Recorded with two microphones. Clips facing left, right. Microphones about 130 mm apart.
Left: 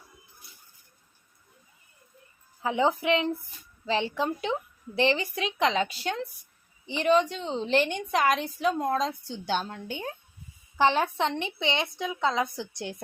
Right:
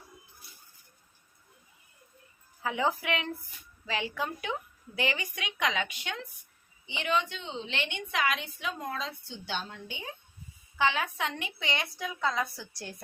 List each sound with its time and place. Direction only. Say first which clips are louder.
2.6 s a woman's voice: left 5 dB; 25° left (ahead or behind); by 10.1 s 50° left (ahead or behind)
10.8 s a woman's voice: left 5 dB; 35° left (ahead or behind)